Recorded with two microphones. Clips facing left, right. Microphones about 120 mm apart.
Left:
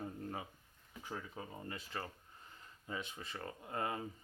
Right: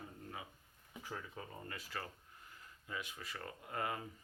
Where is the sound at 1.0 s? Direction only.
20° left (ahead or behind).